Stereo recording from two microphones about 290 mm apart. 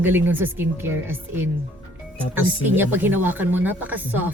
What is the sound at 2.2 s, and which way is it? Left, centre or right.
Speech, centre.